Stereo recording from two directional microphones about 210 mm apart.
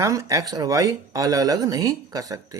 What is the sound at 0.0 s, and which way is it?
Speech, 15° right (ahead or behind).